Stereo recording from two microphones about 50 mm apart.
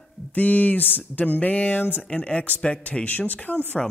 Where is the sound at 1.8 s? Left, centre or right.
Left.